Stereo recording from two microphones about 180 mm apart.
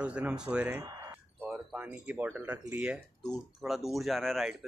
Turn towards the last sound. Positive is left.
turn(degrees=0)  # may be behind; listen again after turning